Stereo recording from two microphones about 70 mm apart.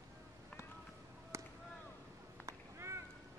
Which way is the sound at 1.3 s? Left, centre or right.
Right.